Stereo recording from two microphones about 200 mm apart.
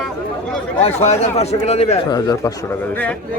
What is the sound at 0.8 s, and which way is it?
A man's voice, 35° left (ahead or behind).